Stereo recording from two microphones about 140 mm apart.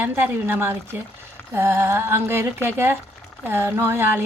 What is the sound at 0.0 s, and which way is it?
Speech, 15° right (ahead or behind).